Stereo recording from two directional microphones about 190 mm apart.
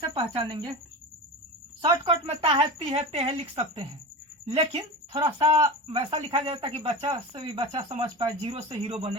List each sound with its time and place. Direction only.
0.1 s speech: 25° right (ahead or behind)
1.8 s a woman's voice: 25° right (ahead or behind)